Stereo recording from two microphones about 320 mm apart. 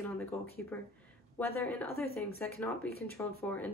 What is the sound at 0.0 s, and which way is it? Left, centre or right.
A woman's voice, centre.